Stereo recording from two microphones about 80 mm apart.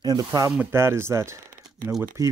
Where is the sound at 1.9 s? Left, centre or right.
Right.